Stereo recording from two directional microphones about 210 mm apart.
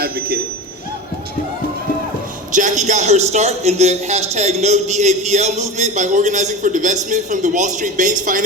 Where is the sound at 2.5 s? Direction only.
35° right (ahead or behind).